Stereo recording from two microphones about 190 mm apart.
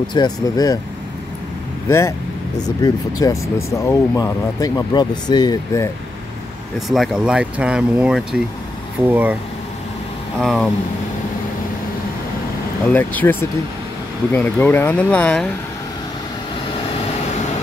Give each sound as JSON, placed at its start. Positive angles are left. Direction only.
{"t": 0.1, "sound": "speech", "side_deg": 20}
{"t": 1.9, "sound": "speech", "side_deg": 15}
{"t": 6.9, "sound": "speech", "side_deg": 0}
{"t": 10.4, "sound": "speech", "side_deg": 0}
{"t": 12.8, "sound": "speech", "side_deg": 10}